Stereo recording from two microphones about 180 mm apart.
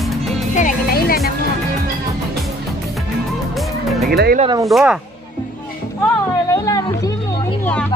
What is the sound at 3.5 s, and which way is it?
Music, centre (ahead or behind).